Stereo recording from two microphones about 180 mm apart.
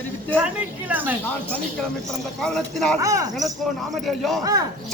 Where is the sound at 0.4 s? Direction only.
10° right (ahead or behind).